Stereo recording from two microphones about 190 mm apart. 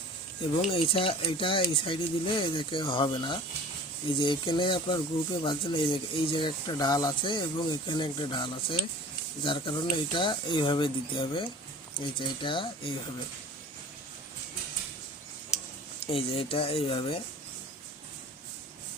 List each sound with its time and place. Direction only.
0.6 s speech: 30° left (ahead or behind)
16.0 s speech: 30° left (ahead or behind)